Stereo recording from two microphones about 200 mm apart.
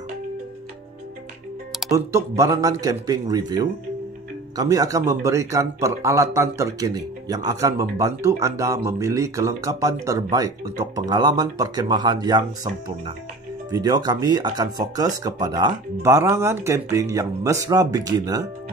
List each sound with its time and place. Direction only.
1.9 s speech: 15° right (ahead or behind)